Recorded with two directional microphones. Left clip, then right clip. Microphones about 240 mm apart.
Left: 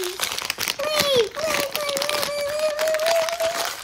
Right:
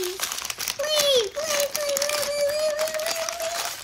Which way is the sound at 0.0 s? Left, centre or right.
Left.